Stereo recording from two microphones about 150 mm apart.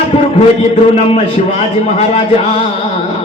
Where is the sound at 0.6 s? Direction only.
45° left (ahead or behind).